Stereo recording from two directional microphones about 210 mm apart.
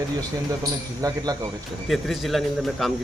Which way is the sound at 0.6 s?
15° right (ahead or behind).